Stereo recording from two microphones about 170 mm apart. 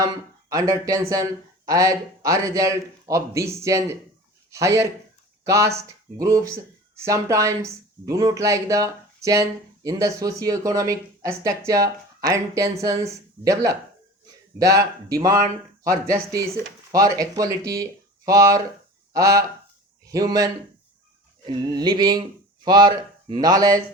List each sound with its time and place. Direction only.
0.0 s speech: 20° right (ahead or behind)